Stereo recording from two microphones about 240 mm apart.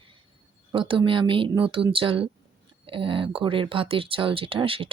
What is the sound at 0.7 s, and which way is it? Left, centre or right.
Speech, centre.